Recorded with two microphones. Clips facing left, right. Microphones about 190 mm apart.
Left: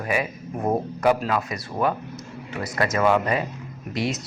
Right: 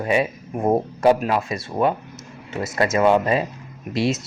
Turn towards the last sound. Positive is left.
turn(degrees=-25)  # may be behind; listen again after turning